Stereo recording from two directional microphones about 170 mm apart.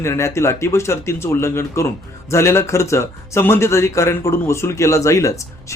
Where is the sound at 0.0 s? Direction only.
15° left (ahead or behind).